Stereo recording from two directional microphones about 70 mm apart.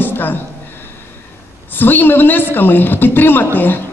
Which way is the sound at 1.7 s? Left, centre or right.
Left.